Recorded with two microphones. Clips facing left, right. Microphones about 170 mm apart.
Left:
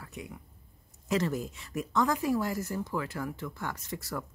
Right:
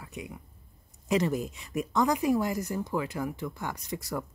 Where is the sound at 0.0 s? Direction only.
15° right (ahead or behind).